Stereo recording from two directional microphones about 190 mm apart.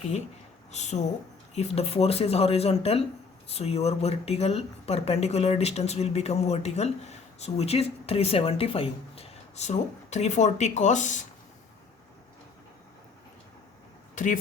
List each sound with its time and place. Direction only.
0.7 s speech: 35° left (ahead or behind)